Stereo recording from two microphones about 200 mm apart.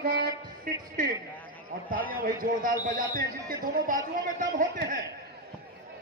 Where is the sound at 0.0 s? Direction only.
50° right (ahead or behind).